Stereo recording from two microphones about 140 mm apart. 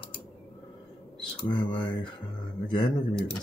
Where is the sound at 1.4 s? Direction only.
30° left (ahead or behind).